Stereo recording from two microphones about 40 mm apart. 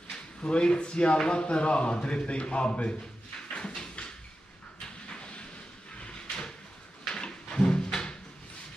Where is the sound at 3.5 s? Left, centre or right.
Centre.